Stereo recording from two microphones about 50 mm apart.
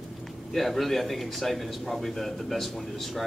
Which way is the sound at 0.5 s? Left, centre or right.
Centre.